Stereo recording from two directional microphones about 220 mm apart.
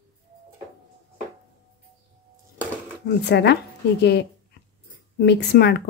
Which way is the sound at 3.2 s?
50° left (ahead or behind).